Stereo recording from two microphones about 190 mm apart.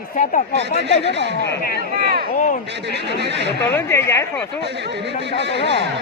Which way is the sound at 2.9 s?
65° right (ahead or behind).